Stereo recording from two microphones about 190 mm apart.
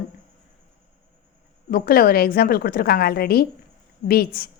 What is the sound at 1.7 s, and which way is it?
A woman's voice, 50° left (ahead or behind).